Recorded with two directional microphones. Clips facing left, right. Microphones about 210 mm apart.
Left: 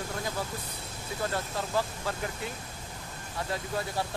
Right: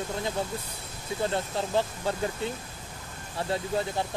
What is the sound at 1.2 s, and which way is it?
Speech, 25° right (ahead or behind).